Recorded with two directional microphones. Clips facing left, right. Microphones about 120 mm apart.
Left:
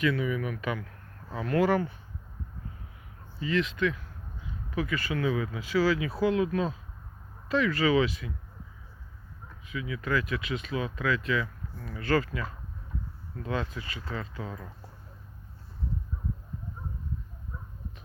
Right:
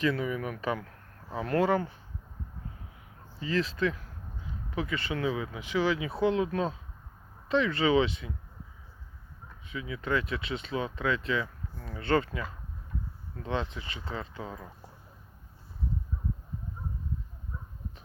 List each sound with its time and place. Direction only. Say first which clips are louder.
0.0 s speech: left 1 dB; 35° right (ahead or behind)
3.4 s speech: left 1 dB; 35° right (ahead or behind)
9.6 s speech: left 1 dB; 30° right (ahead or behind)